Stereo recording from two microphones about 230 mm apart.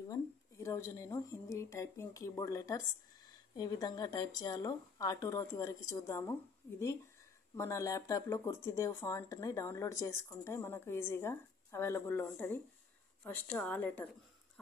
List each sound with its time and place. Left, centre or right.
0.1 s speech: centre
7.5 s speech: centre